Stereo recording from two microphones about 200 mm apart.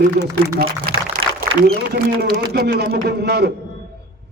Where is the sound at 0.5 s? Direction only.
45° right (ahead or behind).